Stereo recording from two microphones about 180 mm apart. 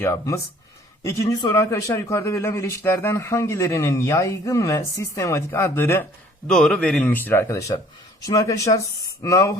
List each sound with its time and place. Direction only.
0.0 s speech: 15° left (ahead or behind)